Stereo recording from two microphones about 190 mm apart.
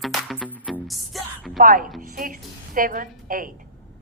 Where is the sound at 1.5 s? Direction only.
45° right (ahead or behind).